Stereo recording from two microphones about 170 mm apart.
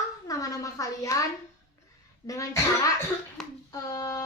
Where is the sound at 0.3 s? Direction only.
20° left (ahead or behind).